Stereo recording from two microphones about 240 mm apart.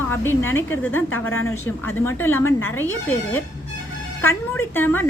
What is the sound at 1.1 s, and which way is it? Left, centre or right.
Speech, left.